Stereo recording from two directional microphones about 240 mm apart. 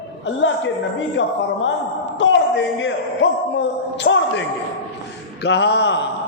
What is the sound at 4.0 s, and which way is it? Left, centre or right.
Speech, left.